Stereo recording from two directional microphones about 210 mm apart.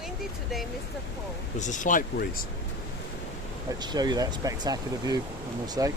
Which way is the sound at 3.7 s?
20° right (ahead or behind).